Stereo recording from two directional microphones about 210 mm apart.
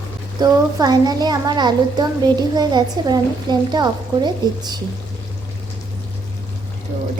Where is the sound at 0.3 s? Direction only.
20° right (ahead or behind).